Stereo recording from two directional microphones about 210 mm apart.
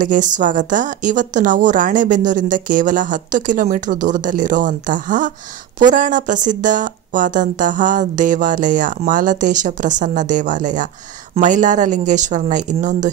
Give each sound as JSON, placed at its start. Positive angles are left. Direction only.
{"t": 0.0, "sound": "a woman's voice", "side_deg": -40}